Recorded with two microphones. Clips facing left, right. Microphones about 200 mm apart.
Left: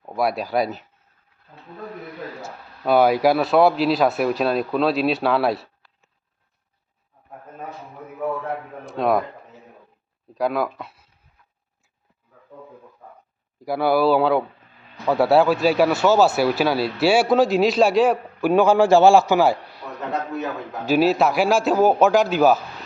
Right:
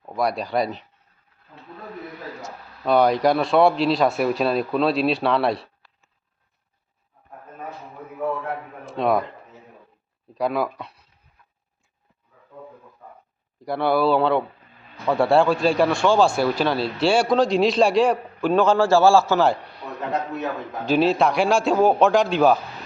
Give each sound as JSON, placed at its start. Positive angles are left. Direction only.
{"t": 0.0, "sound": "speech", "side_deg": 5}
{"t": 2.4, "sound": "speech", "side_deg": 5}
{"t": 8.9, "sound": "speech", "side_deg": 0}
{"t": 10.3, "sound": "speech", "side_deg": 0}
{"t": 13.6, "sound": "a man's voice", "side_deg": 5}
{"t": 20.0, "sound": "speech", "side_deg": 0}